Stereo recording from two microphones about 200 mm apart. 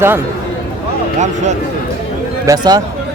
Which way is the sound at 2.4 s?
15° right (ahead or behind).